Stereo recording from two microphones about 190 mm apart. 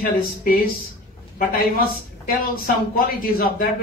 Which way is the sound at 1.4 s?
50° left (ahead or behind).